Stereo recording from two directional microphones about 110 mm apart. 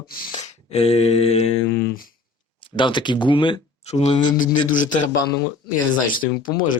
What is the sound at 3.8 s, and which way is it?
Speech, 90° left.